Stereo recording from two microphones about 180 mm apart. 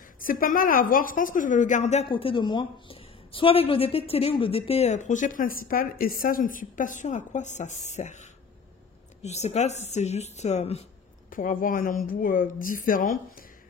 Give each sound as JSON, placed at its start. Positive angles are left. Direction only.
{"t": 0.2, "sound": "a woman's voice", "side_deg": 50}
{"t": 11.2, "sound": "a woman's voice", "side_deg": 50}